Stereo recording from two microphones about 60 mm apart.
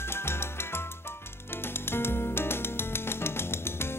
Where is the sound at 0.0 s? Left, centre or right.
Left.